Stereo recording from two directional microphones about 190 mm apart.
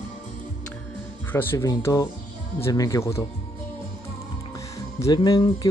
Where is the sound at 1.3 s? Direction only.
10° left (ahead or behind).